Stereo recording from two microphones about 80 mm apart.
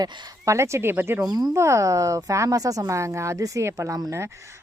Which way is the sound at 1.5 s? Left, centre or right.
Right.